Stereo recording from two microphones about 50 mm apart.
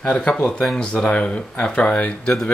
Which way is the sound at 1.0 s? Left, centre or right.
Left.